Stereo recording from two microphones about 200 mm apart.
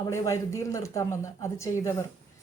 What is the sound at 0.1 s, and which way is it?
Speech, 15° left (ahead or behind).